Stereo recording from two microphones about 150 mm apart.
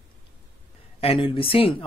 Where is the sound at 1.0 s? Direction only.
40° left (ahead or behind).